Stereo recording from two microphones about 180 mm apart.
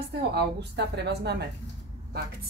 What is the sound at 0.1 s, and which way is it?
A woman's voice, 65° right (ahead or behind).